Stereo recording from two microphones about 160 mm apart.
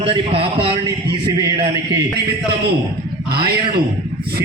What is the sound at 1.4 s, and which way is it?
Speech, 20° right (ahead or behind).